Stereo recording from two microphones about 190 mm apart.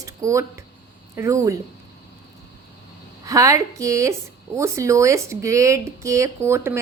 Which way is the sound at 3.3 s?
15° right (ahead or behind).